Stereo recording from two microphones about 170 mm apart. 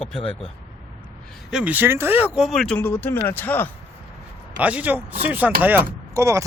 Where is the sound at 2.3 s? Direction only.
Centre (ahead or behind).